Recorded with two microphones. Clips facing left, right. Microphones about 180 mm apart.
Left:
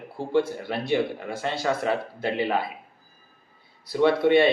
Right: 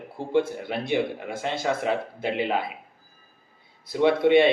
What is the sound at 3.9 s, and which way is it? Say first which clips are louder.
Speech: even; 15° right (ahead or behind).